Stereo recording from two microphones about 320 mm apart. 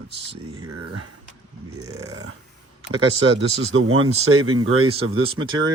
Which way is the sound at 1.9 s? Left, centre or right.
Centre.